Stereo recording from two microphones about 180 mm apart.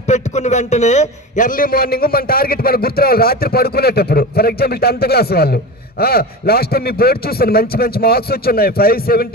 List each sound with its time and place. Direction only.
0.1 s a man's voice: 40° left (ahead or behind); by 9.3 s 55° left (ahead or behind)